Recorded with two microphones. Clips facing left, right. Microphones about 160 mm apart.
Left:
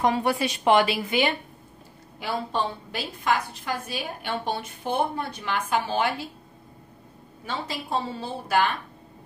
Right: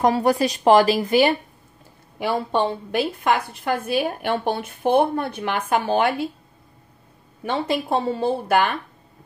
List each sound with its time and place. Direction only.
0.0 s speech: 40° right (ahead or behind)
2.1 s a woman's voice: 60° right (ahead or behind)
7.4 s a woman's voice: 60° right (ahead or behind)